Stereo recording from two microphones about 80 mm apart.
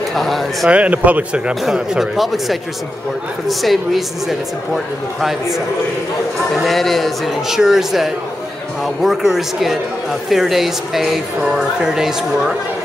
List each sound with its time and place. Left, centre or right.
0.1 s speech: centre
0.7 s speech: centre
1.5 s speech: centre